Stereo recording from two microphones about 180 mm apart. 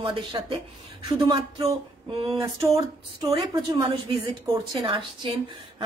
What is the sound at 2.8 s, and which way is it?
A woman's voice, 25° right (ahead or behind).